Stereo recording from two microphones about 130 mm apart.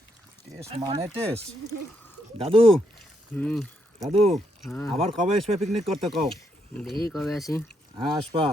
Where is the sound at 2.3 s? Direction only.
45° right (ahead or behind).